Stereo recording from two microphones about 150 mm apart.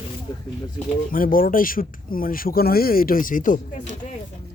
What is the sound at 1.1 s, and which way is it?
Speech, 70° left (ahead or behind).